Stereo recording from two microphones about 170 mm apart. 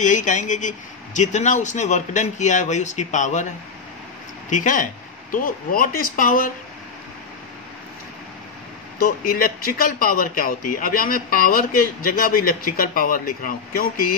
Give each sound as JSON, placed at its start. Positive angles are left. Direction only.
{"t": 0.0, "sound": "speech", "side_deg": 50}
{"t": 9.0, "sound": "speech", "side_deg": 60}